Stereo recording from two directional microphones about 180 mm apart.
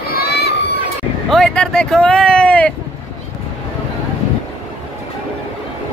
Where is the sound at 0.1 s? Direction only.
60° left (ahead or behind).